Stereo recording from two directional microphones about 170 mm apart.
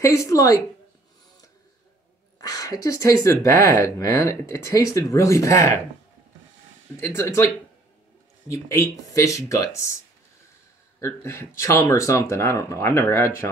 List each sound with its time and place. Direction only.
0.0 s speech: 20° left (ahead or behind)
2.4 s speech: 20° left (ahead or behind)
7.0 s speech: 15° left (ahead or behind)
11.0 s speech: 15° left (ahead or behind)